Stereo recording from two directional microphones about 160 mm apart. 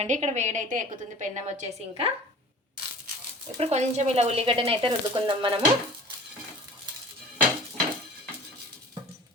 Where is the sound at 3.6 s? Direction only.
45° right (ahead or behind).